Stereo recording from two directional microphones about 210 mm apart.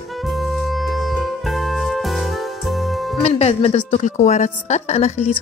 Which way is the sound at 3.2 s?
30° left (ahead or behind).